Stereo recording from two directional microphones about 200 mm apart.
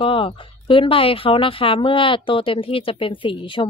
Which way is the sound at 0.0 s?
25° left (ahead or behind).